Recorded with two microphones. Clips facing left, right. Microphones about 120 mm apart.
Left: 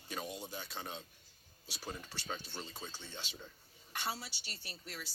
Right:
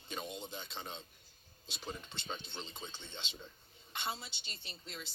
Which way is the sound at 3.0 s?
10° left (ahead or behind).